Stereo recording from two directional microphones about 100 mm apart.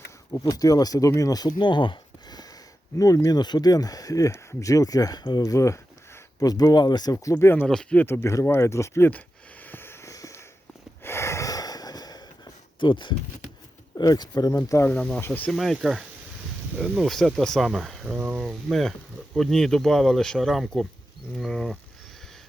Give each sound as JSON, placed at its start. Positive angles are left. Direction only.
{"t": 0.3, "sound": "speech", "side_deg": 35}
{"t": 3.0, "sound": "speech", "side_deg": 35}
{"t": 5.4, "sound": "speech", "side_deg": 30}
{"t": 7.3, "sound": "speech", "side_deg": 20}
{"t": 7.7, "sound": "speech", "side_deg": 5}
{"t": 7.9, "sound": "speech", "side_deg": 25}
{"t": 9.0, "sound": "a sound", "side_deg": 15}
{"t": 12.8, "sound": "speech", "side_deg": 50}
{"t": 13.9, "sound": "speech", "side_deg": 40}
{"t": 14.8, "sound": "speech", "side_deg": 15}
{"t": 15.5, "sound": "speech", "side_deg": 0}